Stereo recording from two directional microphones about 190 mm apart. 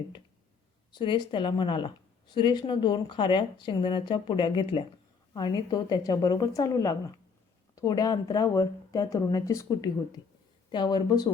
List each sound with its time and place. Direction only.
0.9 s a woman's voice: 25° left (ahead or behind)